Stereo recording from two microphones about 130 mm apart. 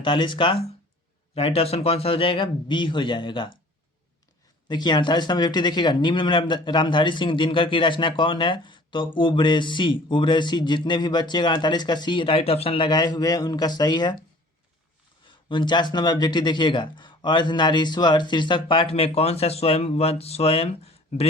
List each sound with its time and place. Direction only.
0.0 s a man's voice: 40° left (ahead or behind)
4.7 s a man's voice: 35° left (ahead or behind)
15.4 s a man's voice: 35° left (ahead or behind)